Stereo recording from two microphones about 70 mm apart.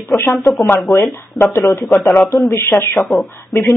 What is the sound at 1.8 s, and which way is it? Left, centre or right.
Speech, left.